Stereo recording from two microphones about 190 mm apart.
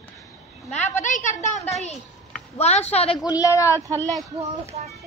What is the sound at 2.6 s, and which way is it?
Speech, 35° left (ahead or behind).